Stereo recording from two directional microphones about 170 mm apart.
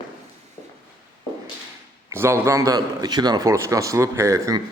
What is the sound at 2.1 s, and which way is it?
A man's voice, 15° right (ahead or behind).